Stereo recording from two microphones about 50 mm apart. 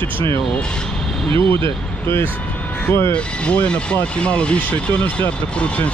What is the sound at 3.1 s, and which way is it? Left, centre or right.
Speech, left.